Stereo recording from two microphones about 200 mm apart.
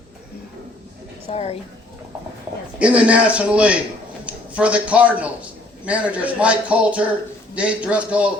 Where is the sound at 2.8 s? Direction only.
5° right (ahead or behind).